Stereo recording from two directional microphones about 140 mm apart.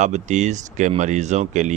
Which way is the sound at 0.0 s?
60° right (ahead or behind).